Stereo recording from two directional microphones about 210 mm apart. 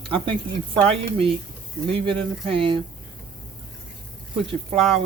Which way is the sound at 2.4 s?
25° right (ahead or behind).